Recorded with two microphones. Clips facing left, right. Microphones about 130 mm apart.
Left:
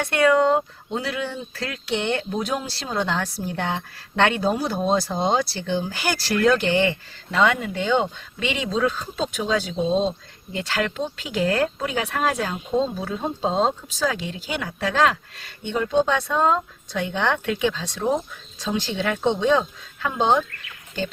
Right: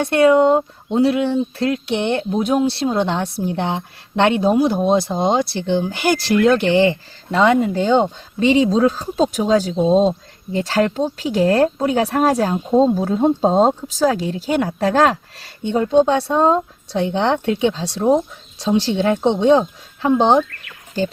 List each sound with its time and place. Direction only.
0.0 s speech: 25° right (ahead or behind)